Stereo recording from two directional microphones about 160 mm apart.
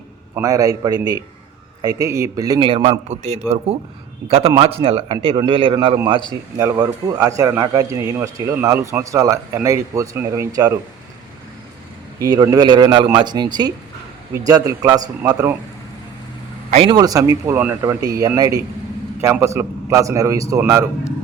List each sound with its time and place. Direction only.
0.3 s a man's voice: 20° right (ahead or behind)
6.6 s a man's voice: 20° right (ahead or behind)
12.2 s a man's voice: 20° right (ahead or behind)
16.7 s a man's voice: 30° right (ahead or behind)